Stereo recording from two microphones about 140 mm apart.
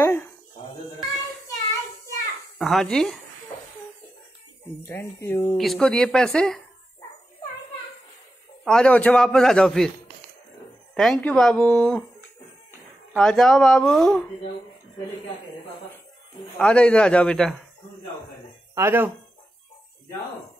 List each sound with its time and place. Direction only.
0.0 s a sound: 15° left (ahead or behind)
2.6 s a man's voice: centre (ahead or behind)
4.8 s a man's voice: 15° left (ahead or behind)
5.6 s a man's voice: 5° left (ahead or behind)
8.6 s a man's voice: 5° left (ahead or behind)
11.0 s a man's voice: centre (ahead or behind)
13.1 s a man's voice: 5° left (ahead or behind)
16.5 s a man's voice: 10° left (ahead or behind)
18.8 s speech: 15° right (ahead or behind)